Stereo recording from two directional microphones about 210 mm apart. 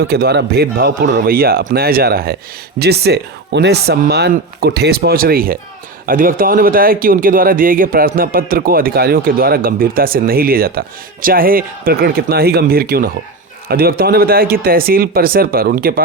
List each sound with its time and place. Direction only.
0.0 s speech: 50° right (ahead or behind)